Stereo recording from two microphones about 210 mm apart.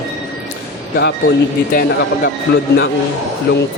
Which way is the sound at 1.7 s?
45° left (ahead or behind).